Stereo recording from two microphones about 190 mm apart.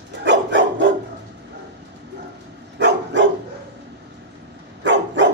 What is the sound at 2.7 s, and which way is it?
Dog, 70° right (ahead or behind).